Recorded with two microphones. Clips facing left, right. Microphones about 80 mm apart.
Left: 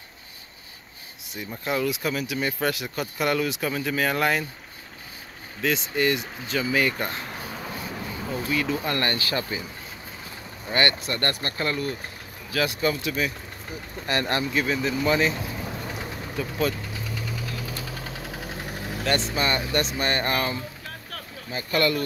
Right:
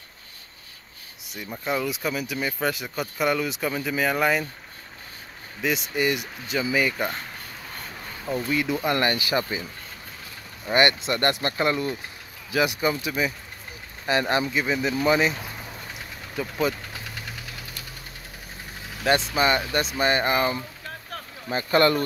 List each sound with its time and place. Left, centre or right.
1.2 s speech: centre
5.6 s speech: centre
8.5 s speech: centre
10.7 s speech: right
16.3 s speech: centre
18.4 s vehicle: left
19.3 s speech: centre
21.5 s speech: right